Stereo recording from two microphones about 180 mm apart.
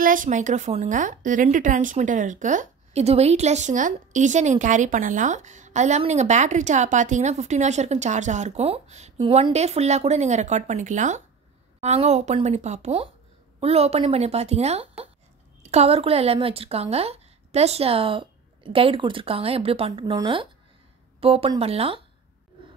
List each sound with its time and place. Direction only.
0.0 s speech: 50° right (ahead or behind); by 22.0 s 35° right (ahead or behind)